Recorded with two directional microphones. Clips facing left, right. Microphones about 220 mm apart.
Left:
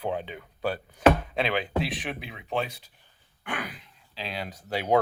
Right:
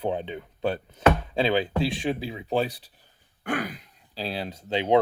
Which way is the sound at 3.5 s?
40° right (ahead or behind).